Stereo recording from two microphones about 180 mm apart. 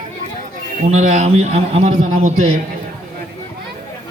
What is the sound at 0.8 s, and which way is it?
A man's voice, 40° right (ahead or behind).